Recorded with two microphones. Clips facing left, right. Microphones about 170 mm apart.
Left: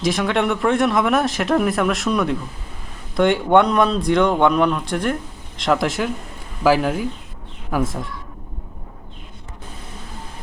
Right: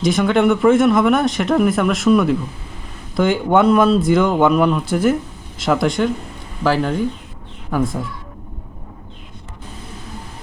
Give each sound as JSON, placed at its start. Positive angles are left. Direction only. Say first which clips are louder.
{"t": 0.0, "sound": "speech", "louder": "right 5 dB", "side_deg": 0}